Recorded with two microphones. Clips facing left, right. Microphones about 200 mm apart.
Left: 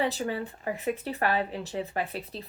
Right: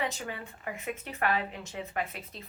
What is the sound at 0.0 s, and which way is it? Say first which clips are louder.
Speech: left 6 dB; 35° left (ahead or behind).